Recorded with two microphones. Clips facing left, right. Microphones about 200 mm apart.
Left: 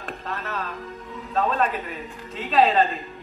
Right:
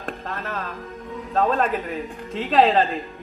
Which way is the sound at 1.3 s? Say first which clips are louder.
Right 2 dB; 50° right (ahead or behind).